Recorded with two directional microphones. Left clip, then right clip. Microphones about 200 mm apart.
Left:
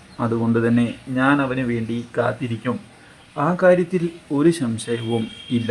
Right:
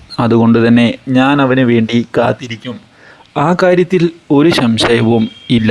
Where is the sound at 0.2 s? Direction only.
50° right (ahead or behind).